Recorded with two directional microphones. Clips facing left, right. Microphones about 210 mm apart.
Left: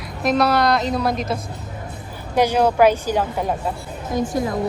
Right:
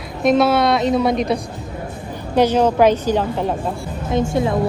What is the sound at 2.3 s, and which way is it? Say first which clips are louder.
A woman's voice: right 2 dB; 10° left (ahead or behind).